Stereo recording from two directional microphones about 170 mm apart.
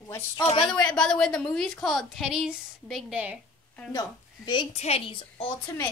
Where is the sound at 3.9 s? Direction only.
20° left (ahead or behind).